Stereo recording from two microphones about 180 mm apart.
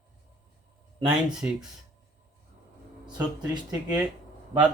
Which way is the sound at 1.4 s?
10° right (ahead or behind).